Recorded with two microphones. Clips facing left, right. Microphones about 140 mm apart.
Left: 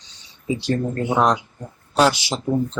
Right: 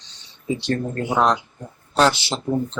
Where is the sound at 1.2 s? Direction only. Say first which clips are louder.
Even; 10° left (ahead or behind).